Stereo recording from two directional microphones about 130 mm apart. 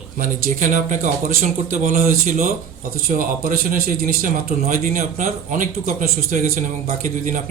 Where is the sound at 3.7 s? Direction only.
90° right.